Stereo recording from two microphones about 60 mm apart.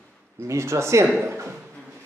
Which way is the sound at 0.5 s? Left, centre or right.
Right.